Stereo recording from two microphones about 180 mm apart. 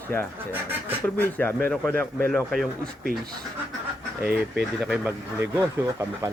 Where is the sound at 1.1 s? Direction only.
10° left (ahead or behind).